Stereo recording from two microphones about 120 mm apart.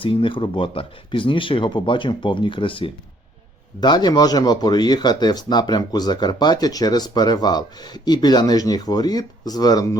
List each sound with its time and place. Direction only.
0.0 s speech: 45° left (ahead or behind)